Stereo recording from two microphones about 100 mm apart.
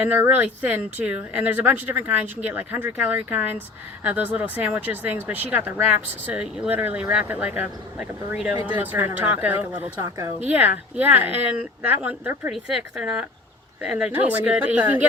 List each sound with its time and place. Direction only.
0.0 s speech: 15° right (ahead or behind)
12.5 s speech: 5° right (ahead or behind)